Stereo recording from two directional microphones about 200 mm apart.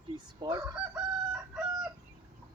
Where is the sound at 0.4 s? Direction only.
20° right (ahead or behind).